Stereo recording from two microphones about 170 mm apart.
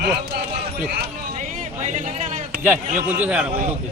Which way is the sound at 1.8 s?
45° right (ahead or behind).